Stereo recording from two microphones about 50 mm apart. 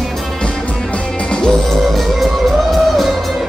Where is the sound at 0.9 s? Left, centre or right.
Centre.